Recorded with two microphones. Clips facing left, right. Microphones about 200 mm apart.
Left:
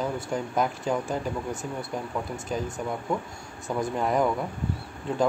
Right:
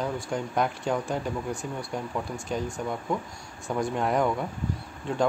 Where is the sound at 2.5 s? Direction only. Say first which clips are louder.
Even; centre (ahead or behind).